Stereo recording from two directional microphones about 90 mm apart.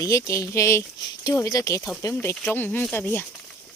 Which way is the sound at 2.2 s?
25° left (ahead or behind).